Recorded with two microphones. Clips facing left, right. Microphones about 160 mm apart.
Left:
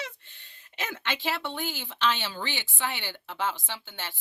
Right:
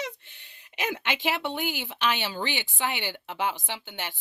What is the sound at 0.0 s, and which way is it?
A woman's voice, 15° right (ahead or behind).